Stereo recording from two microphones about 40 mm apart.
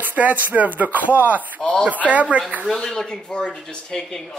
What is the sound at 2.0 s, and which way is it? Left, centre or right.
Speech, right.